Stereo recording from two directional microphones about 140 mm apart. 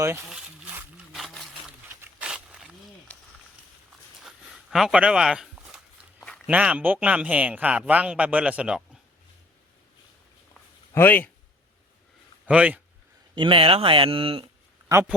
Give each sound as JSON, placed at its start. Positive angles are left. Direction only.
{"t": 0.0, "sound": "a man's voice", "side_deg": -15}
{"t": 1.1, "sound": "a sound", "side_deg": 0}
{"t": 4.2, "sound": "a sound", "side_deg": 0}
{"t": 6.2, "sound": "a sound", "side_deg": 5}
{"t": 6.5, "sound": "a man's voice", "side_deg": -10}
{"t": 10.9, "sound": "speech", "side_deg": 15}
{"t": 12.5, "sound": "a man's voice", "side_deg": -10}
{"t": 13.3, "sound": "speech", "side_deg": -35}
{"t": 14.9, "sound": "speech", "side_deg": -25}